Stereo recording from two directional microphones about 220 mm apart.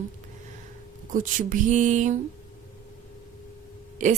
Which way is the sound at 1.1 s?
35° right (ahead or behind).